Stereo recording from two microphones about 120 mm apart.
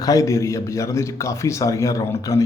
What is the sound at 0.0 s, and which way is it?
A man's voice, 30° left (ahead or behind).